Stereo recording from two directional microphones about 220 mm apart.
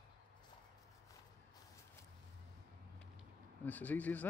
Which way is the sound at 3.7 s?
5° left (ahead or behind).